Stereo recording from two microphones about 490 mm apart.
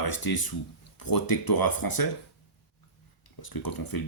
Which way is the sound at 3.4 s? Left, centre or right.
Left.